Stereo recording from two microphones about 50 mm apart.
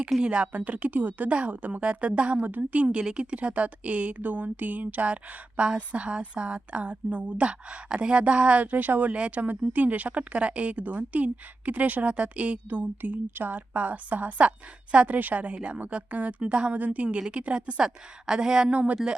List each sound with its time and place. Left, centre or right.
0.2 s a woman's voice: right
2.4 s speech: right
9.1 s speech: right
9.4 s a woman's voice: right
16.7 s speech: right
17.2 s a woman's voice: centre
18.7 s speech: right